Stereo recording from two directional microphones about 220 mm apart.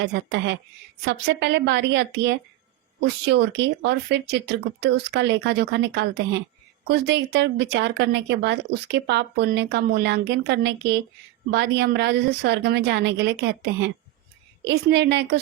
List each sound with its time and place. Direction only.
0.0 s speech: 50° right (ahead or behind)